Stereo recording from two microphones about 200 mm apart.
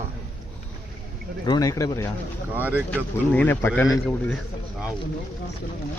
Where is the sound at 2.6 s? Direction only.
10° right (ahead or behind).